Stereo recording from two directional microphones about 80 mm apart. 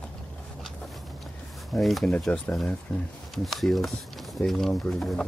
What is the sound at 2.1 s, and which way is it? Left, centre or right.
Speech, centre.